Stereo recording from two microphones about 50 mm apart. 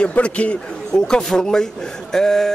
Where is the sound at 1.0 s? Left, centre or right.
Centre.